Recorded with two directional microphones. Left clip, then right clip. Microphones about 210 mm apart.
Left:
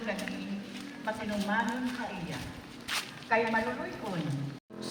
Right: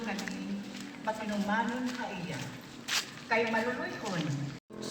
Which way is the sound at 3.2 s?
25° right (ahead or behind).